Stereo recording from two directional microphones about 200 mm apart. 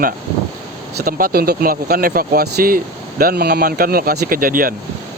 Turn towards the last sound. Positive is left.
turn(degrees=-45)  # may be behind; listen again after turning